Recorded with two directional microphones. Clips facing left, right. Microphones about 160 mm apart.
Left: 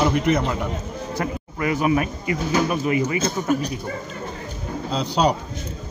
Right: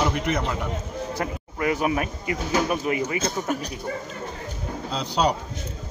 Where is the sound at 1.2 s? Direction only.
45° right (ahead or behind).